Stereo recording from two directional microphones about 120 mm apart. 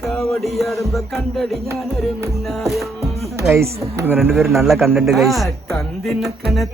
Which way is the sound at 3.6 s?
20° right (ahead or behind).